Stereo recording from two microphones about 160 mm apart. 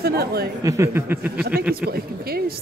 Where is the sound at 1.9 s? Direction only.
75° right (ahead or behind).